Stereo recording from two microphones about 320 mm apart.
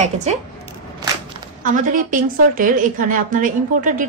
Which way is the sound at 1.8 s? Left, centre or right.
Right.